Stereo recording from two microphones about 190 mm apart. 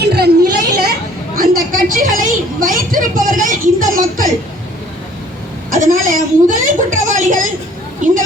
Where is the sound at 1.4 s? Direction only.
45° right (ahead or behind).